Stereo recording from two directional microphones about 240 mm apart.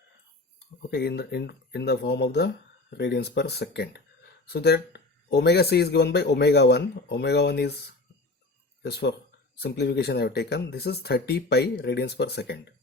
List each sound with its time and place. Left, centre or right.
0.8 s speech: left
8.8 s speech: left